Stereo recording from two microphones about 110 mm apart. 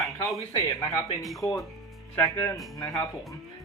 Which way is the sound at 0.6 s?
30° left (ahead or behind).